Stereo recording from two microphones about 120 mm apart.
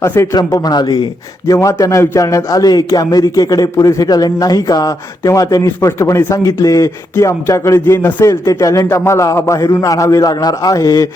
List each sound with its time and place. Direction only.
0.0 s a man's voice: 25° left (ahead or behind)